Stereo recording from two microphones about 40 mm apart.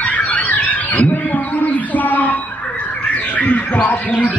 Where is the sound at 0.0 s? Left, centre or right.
Left.